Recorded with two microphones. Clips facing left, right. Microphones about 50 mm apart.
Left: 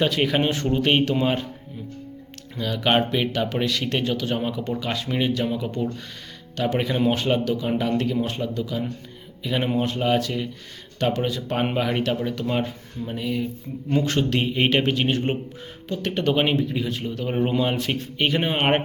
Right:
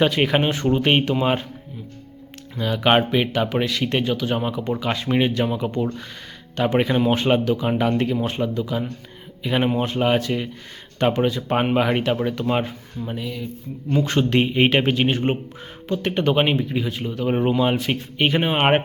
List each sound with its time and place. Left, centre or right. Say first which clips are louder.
0.0 s speech: right 3 dB; right
2.6 s speech: right 3 dB; right
5.0 s speech: right 4 dB; right